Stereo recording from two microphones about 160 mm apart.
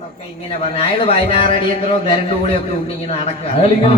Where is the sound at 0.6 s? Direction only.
40° left (ahead or behind).